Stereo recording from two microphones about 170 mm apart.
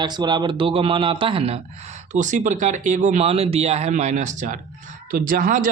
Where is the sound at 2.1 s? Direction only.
45° right (ahead or behind).